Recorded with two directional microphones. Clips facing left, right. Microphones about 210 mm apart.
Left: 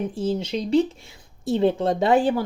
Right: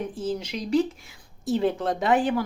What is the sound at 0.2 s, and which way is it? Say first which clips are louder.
Speech: left 6 dB; 25° left (ahead or behind).